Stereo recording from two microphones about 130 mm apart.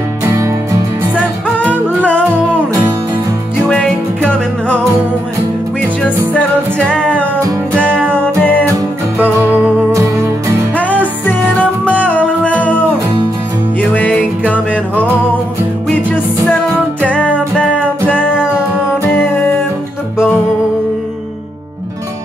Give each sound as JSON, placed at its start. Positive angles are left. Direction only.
{"t": 0.2, "sound": "music", "side_deg": -25}
{"t": 3.6, "sound": "music", "side_deg": 5}
{"t": 5.8, "sound": "music", "side_deg": 10}
{"t": 7.3, "sound": "music", "side_deg": -20}
{"t": 8.1, "sound": "music", "side_deg": 15}
{"t": 10.8, "sound": "music", "side_deg": 10}
{"t": 13.7, "sound": "music", "side_deg": 10}